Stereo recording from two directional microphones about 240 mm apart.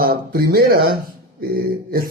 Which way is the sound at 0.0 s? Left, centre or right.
Right.